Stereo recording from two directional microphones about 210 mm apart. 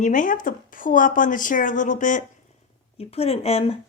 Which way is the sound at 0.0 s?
40° left (ahead or behind).